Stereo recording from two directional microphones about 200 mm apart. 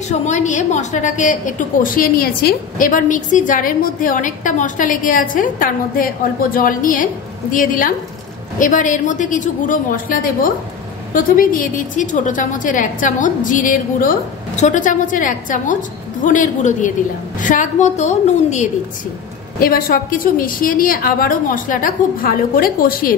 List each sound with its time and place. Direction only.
0.3 s a woman's voice: 35° left (ahead or behind)